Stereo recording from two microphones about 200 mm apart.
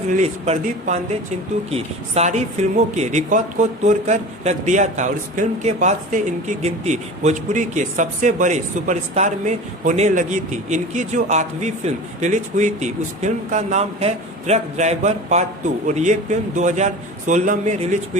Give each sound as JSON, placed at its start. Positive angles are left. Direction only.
{"t": 0.1, "sound": "speech", "side_deg": -35}